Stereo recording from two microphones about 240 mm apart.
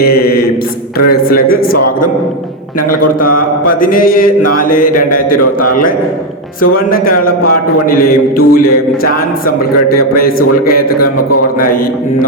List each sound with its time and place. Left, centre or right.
0.0 s mantra: left
1.5 s a man's voice: left
3.8 s speech: left
6.6 s speech: left
11.0 s a man's voice: left